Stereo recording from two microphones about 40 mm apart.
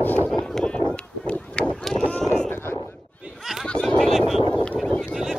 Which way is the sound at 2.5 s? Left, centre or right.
Left.